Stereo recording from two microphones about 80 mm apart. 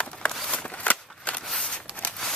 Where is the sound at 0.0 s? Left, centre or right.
Centre.